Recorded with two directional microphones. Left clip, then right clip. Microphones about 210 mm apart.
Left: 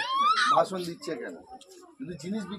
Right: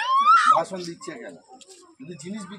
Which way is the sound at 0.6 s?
45° right (ahead or behind).